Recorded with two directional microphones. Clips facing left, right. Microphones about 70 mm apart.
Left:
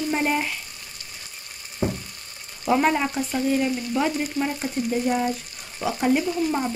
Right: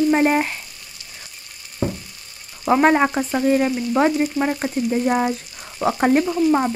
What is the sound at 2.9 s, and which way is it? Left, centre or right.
Frying, right.